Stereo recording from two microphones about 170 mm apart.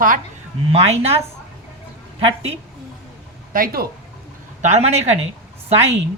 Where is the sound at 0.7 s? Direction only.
35° right (ahead or behind).